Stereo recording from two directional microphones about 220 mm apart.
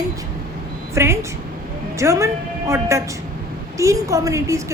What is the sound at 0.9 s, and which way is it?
A woman's voice, 10° right (ahead or behind).